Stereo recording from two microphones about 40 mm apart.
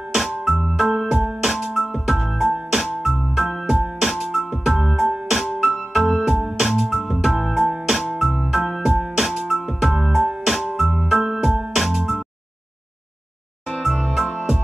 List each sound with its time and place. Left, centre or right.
0.1 s music: centre
13.8 s music: centre